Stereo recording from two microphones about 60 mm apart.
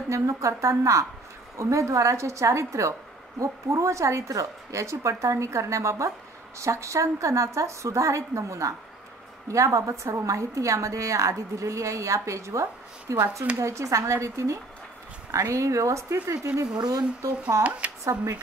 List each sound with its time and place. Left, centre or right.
0.1 s a woman's voice: right
16.5 s speech: right
17.6 s speech: right